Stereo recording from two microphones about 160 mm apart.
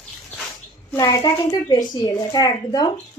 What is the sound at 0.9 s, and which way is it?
Speech, 20° left (ahead or behind).